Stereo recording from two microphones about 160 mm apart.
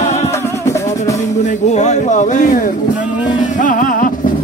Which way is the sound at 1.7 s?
45° left (ahead or behind).